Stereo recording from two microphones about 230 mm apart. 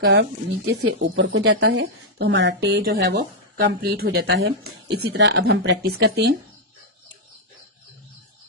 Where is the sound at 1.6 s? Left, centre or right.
Right.